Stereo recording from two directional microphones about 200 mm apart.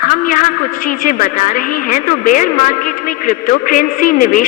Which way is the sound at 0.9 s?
40° left (ahead or behind).